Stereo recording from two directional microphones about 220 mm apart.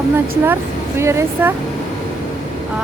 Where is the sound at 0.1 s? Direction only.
10° right (ahead or behind).